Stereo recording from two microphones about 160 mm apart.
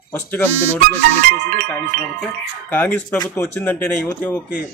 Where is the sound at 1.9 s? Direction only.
70° right (ahead or behind).